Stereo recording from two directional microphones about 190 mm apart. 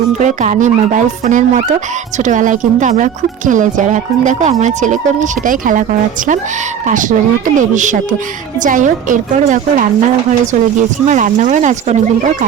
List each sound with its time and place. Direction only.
0.2 s speech: 40° right (ahead or behind)